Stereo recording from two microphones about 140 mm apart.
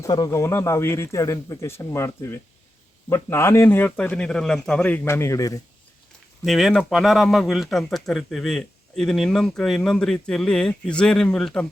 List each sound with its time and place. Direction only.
0.0 s a man's voice: 25° left (ahead or behind); by 5.0 s 10° left (ahead or behind)
5.0 s speech: 20° left (ahead or behind)
6.4 s speech: centre (ahead or behind)